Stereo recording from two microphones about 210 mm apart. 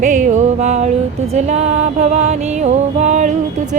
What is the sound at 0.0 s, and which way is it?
Music, 35° right (ahead or behind).